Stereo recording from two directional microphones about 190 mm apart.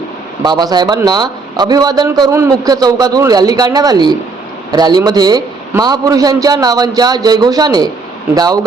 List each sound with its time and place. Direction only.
0.4 s a man's voice: 20° right (ahead or behind)